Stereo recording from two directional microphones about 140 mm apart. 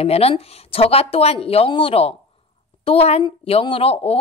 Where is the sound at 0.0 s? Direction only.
45° left (ahead or behind).